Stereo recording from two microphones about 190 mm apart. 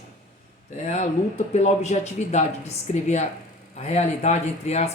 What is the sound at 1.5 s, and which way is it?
Speech, 35° left (ahead or behind).